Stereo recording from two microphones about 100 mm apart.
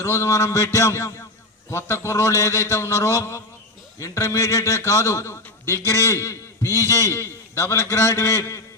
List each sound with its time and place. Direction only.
0.0 s a man's voice: 30° left (ahead or behind)